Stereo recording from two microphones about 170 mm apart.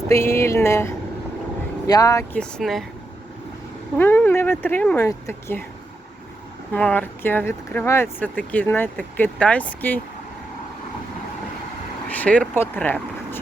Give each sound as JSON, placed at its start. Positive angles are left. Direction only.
{"t": 0.1, "sound": "speech", "side_deg": 15}
{"t": 2.3, "sound": "speech", "side_deg": 5}
{"t": 3.9, "sound": "speech", "side_deg": 10}
{"t": 6.7, "sound": "speech", "side_deg": 10}
{"t": 12.0, "sound": "speech", "side_deg": 10}